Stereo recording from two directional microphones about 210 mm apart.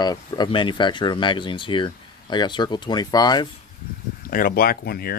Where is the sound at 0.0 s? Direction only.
20° left (ahead or behind).